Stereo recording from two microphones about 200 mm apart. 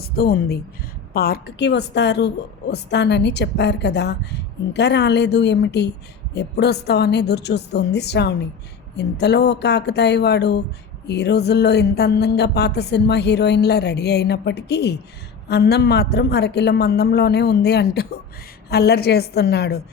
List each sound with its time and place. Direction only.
0.0 s a woman's voice: 50° left (ahead or behind)